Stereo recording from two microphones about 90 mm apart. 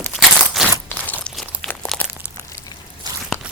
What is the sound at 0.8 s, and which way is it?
Crunch, 20° left (ahead or behind).